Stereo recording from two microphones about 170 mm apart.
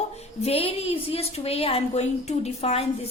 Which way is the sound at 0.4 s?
35° left (ahead or behind).